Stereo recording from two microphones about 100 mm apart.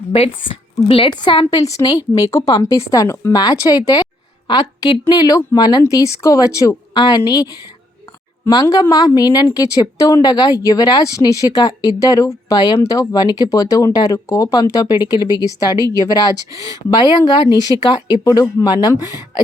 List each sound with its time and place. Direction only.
0.9 s a woman's voice: 60° left (ahead or behind)
1.5 s a woman's voice: 35° left (ahead or behind)
5.8 s a woman's voice: 30° left (ahead or behind)
8.6 s a woman's voice: 40° left (ahead or behind)